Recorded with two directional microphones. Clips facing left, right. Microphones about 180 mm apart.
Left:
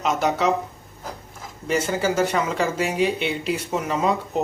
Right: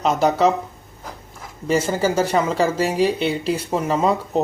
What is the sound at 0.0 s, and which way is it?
Speech, 35° right (ahead or behind).